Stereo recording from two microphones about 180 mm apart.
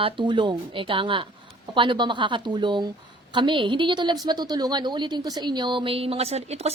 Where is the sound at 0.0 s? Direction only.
25° right (ahead or behind).